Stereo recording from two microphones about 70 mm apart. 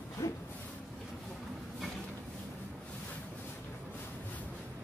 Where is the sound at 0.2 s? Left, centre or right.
Left.